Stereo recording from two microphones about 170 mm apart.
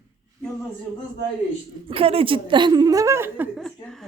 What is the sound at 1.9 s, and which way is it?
A woman's voice, 35° right (ahead or behind).